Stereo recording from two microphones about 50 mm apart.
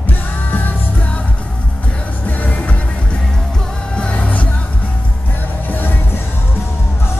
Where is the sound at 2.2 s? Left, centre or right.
Left.